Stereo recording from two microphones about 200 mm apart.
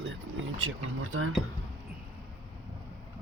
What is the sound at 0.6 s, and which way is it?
Speech, 90° right.